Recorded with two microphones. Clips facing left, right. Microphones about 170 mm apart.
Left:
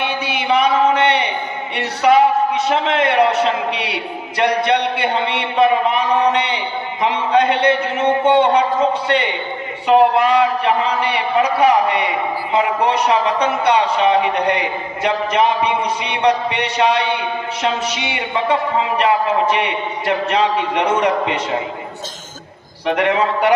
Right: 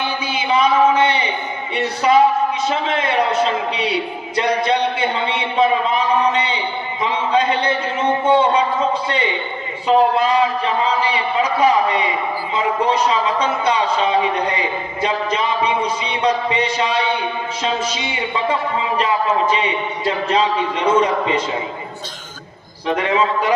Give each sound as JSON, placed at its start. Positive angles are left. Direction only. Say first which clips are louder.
{"t": 0.0, "sound": "a sound", "louder": "left 1 dB", "side_deg": 70}
{"t": 9.8, "sound": "a man's voice", "louder": "left 2 dB", "side_deg": 70}
{"t": 22.9, "sound": "a man's voice", "louder": "left 1 dB", "side_deg": 65}